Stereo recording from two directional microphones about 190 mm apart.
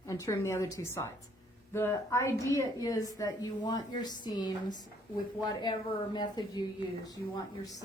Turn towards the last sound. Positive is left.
turn(degrees=20)  # may be behind; listen again after turning